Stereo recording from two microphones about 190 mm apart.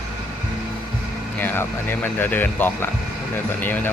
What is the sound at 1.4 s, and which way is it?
Speech, 10° left (ahead or behind).